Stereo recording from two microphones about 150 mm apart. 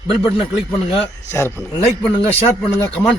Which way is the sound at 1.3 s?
20° left (ahead or behind).